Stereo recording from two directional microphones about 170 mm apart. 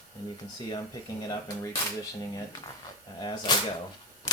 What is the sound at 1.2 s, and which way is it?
Speech, 20° left (ahead or behind).